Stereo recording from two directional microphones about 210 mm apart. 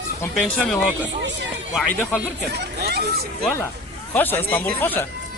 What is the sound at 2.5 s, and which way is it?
Speech, 50° right (ahead or behind).